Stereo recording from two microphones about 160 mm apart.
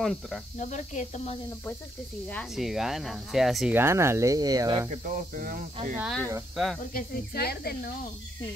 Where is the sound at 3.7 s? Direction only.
15° right (ahead or behind).